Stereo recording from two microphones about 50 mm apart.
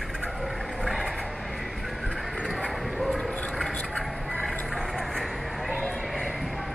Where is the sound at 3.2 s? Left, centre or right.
Centre.